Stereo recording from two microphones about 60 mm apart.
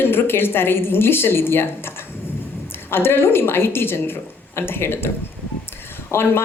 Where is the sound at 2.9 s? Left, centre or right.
Left.